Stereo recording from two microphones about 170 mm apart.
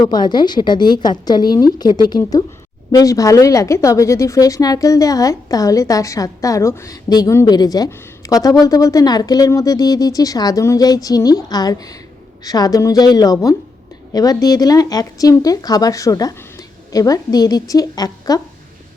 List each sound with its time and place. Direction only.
0.0 s a woman's voice: 25° left (ahead or behind)